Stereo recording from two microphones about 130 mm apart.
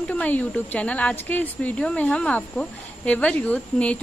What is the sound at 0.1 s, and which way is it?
A woman's voice, 10° left (ahead or behind).